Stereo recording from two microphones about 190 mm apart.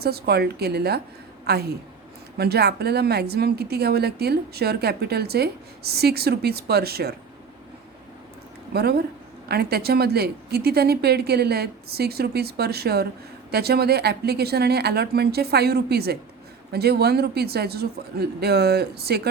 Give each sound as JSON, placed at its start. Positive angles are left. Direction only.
{"t": 0.0, "sound": "a woman's voice", "side_deg": -55}
{"t": 8.7, "sound": "a woman's voice", "side_deg": -55}